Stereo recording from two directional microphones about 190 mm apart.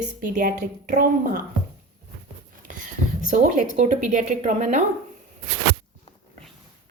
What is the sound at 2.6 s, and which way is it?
A woman's voice, 45° right (ahead or behind).